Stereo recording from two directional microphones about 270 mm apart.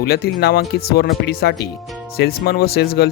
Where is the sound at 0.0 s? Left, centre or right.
Left.